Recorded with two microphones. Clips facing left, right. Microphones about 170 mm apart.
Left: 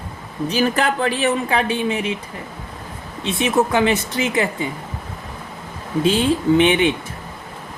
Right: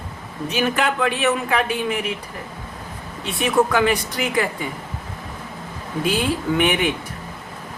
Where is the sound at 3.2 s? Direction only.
25° left (ahead or behind).